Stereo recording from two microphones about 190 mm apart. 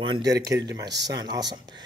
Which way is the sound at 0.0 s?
25° right (ahead or behind).